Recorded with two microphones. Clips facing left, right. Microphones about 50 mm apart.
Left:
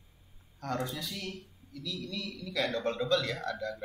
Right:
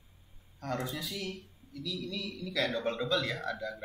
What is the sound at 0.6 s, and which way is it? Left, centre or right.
A man's voice, centre.